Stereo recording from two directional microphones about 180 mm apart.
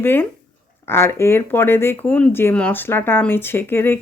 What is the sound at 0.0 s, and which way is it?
Speech, 10° left (ahead or behind).